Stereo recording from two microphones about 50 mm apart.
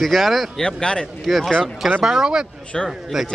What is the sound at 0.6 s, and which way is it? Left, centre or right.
Speech, centre.